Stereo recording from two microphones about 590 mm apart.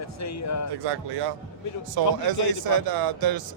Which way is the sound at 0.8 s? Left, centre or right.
Right.